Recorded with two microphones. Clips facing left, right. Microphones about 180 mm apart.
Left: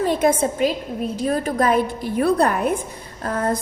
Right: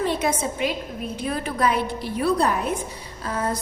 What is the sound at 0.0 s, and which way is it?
A woman's voice, 45° left (ahead or behind).